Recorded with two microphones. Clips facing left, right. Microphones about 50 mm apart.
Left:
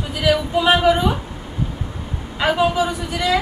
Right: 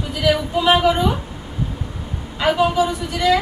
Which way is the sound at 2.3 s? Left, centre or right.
Centre.